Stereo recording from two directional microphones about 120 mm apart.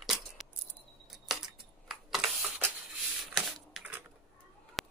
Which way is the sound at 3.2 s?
Centre (ahead or behind).